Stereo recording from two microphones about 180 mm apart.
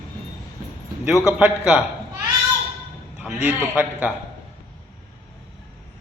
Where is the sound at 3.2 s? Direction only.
10° right (ahead or behind).